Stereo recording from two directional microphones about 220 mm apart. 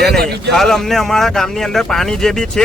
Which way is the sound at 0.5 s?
Centre (ahead or behind).